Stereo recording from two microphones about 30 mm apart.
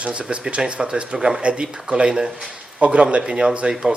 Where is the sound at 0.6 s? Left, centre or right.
Right.